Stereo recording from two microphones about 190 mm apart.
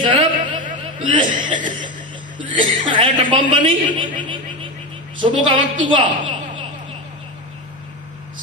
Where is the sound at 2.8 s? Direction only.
25° right (ahead or behind).